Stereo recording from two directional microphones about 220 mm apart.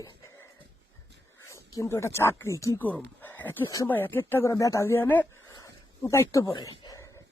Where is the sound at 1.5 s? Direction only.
15° left (ahead or behind).